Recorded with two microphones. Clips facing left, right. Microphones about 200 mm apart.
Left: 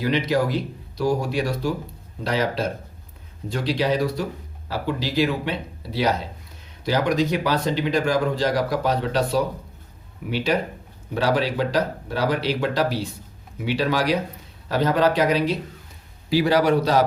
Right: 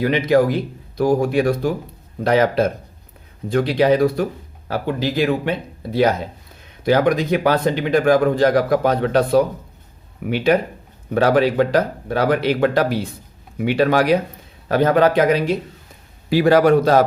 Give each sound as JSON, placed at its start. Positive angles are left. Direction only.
{"t": 0.0, "sound": "speech", "side_deg": -55}